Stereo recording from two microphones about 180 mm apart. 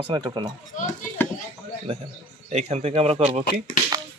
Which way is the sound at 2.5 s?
40° right (ahead or behind).